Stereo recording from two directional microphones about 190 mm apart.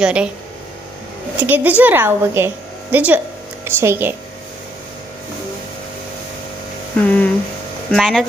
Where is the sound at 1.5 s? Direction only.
10° right (ahead or behind).